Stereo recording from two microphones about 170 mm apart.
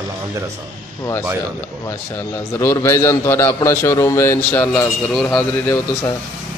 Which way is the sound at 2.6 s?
15° left (ahead or behind).